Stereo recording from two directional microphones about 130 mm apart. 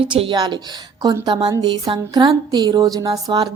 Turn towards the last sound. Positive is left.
turn(degrees=-30)  # may be behind; listen again after turning